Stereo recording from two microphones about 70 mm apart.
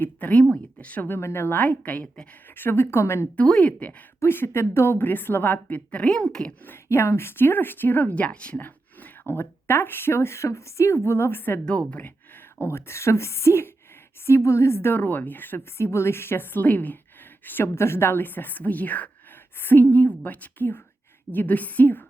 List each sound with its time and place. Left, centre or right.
0.0 s speech: left
1.1 s speech: left
1.5 s a woman's voice: left
2.6 s speech: left
3.4 s speech: centre
4.2 s speech: left; by 6.5 s centre
6.8 s speech: left
11.6 s speech: centre
12.5 s a woman's voice: left